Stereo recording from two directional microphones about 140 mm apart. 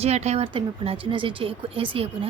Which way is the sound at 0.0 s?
50° right (ahead or behind).